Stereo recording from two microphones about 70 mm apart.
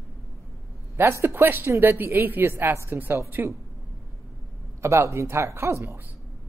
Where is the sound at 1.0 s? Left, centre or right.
Right.